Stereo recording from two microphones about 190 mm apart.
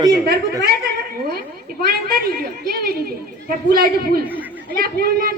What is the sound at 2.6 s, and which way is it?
A man's voice, 55° right (ahead or behind).